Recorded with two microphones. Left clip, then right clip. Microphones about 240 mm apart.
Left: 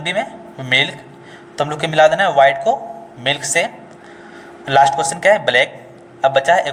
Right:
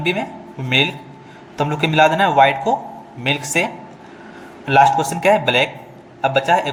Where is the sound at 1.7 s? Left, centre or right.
Left.